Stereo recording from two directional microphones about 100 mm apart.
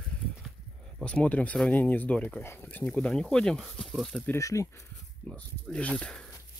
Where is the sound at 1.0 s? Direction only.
15° left (ahead or behind).